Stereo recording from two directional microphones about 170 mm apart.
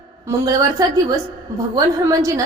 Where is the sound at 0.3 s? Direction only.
20° right (ahead or behind).